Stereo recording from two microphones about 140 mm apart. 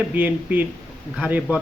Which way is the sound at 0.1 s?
10° right (ahead or behind).